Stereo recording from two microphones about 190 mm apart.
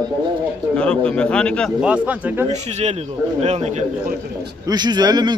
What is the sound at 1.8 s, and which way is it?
Speech, 5° right (ahead or behind).